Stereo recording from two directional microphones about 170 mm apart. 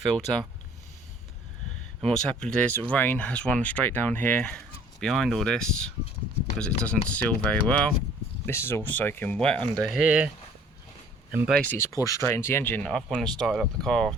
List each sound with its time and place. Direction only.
0.0 s speech: 5° left (ahead or behind)
2.0 s speech: 5° left (ahead or behind)
10.0 s speech: 5° right (ahead or behind)
11.5 s speech: 10° left (ahead or behind)